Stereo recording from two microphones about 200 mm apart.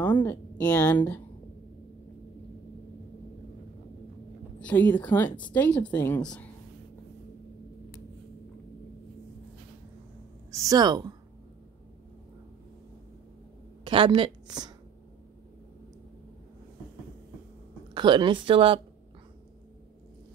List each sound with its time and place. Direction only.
0.2 s a woman's voice: 10° left (ahead or behind)
4.6 s a woman's voice: 5° left (ahead or behind)
10.5 s a woman's voice: 15° right (ahead or behind)
13.8 s a woman's voice: 25° right (ahead or behind)
17.9 s speech: 25° right (ahead or behind)